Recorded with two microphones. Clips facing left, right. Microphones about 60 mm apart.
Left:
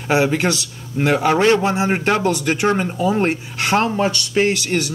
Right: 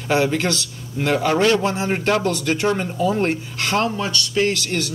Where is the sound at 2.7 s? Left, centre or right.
Left; by 4.9 s centre.